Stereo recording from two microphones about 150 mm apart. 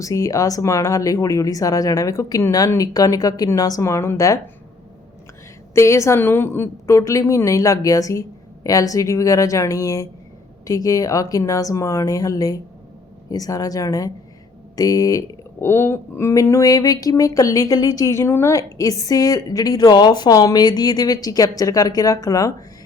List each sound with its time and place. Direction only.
0.0 s speech: 20° left (ahead or behind)
5.7 s speech: 20° left (ahead or behind)